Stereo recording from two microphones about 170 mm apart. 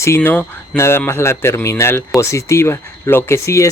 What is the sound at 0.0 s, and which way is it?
Speech, 15° left (ahead or behind).